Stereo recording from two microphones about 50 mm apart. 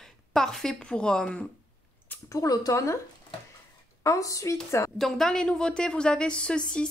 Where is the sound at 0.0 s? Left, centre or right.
Centre.